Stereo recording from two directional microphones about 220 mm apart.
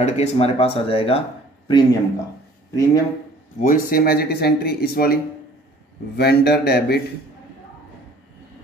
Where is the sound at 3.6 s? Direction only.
40° left (ahead or behind).